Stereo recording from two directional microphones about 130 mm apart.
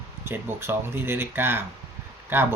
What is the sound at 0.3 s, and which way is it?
Speech, 20° right (ahead or behind).